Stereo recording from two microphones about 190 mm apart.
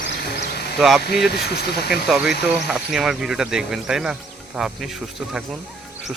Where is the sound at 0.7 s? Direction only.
Centre (ahead or behind).